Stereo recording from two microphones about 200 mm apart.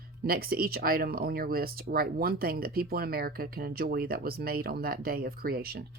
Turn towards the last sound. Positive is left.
turn(degrees=-50)  # may be behind; listen again after turning